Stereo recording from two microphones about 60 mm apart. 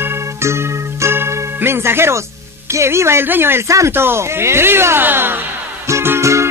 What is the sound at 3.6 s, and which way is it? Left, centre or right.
Speech, right.